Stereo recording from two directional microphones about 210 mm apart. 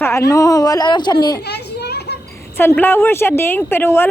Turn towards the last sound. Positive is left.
turn(degrees=10)  # may be behind; listen again after turning